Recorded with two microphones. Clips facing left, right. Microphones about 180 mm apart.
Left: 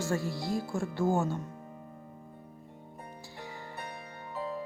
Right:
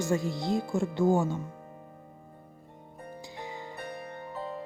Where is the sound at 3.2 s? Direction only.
15° right (ahead or behind).